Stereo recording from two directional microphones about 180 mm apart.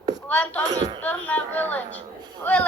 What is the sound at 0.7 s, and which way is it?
Speech, 20° right (ahead or behind).